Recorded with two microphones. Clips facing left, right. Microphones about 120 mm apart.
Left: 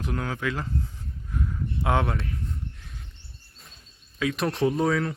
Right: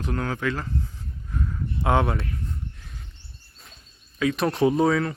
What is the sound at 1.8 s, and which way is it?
Speech, centre (ahead or behind).